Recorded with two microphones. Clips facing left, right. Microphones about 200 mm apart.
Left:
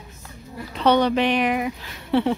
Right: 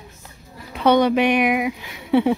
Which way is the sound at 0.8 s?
10° right (ahead or behind).